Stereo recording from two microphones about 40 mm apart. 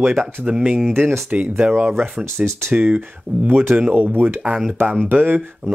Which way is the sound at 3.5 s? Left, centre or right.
Right.